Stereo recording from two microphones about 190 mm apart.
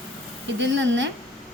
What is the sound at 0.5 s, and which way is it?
Speech, 75° right (ahead or behind).